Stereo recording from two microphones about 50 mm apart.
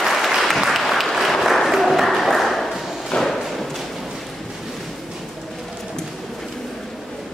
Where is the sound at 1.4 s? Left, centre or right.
Centre.